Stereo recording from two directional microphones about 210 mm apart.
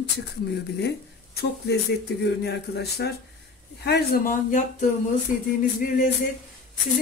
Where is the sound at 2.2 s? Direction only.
55° left (ahead or behind).